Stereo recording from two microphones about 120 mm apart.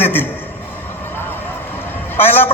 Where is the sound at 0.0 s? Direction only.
15° left (ahead or behind).